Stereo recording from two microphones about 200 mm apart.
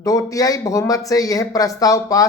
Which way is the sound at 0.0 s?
15° left (ahead or behind).